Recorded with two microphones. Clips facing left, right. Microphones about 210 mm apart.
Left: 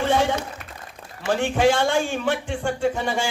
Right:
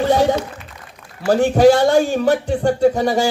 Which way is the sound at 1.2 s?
40° right (ahead or behind).